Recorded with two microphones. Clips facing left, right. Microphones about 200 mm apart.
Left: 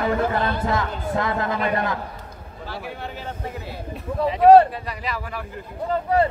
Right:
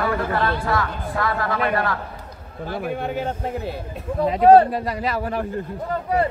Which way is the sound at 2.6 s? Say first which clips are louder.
Right 7 dB; 50° right (ahead or behind).